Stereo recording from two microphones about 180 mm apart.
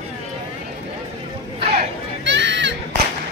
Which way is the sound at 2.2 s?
80° right.